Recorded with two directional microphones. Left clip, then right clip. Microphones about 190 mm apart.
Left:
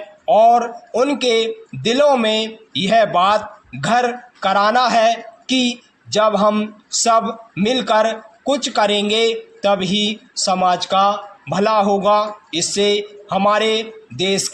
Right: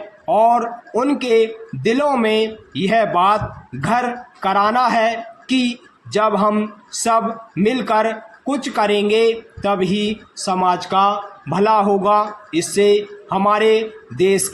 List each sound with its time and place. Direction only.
0.3 s a man's voice: 20° left (ahead or behind)